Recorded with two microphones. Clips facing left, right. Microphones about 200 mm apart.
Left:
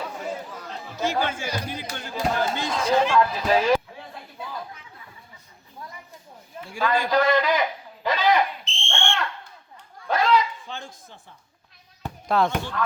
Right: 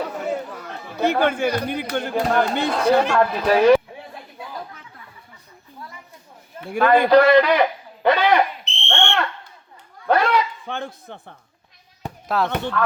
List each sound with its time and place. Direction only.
0.3 s speech: 65° right (ahead or behind)
6.7 s a sound: 60° right (ahead or behind)
12.3 s speech: 5° right (ahead or behind)
12.7 s speech: 60° right (ahead or behind)